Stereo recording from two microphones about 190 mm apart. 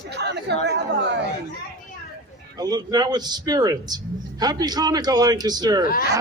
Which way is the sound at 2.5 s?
20° right (ahead or behind).